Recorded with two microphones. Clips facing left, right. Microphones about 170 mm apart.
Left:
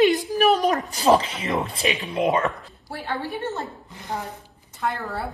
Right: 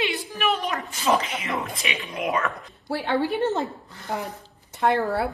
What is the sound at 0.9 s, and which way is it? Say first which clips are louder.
Speech: left 2 dB; 35° left (ahead or behind).